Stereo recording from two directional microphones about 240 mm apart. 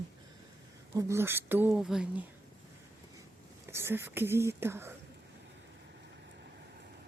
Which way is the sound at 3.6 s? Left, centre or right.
Centre.